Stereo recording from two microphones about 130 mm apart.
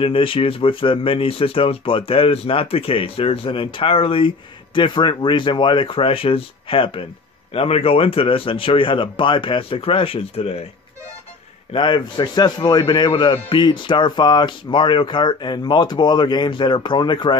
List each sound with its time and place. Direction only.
0.0 s a man's voice: 45° left (ahead or behind)
11.7 s a man's voice: 40° left (ahead or behind)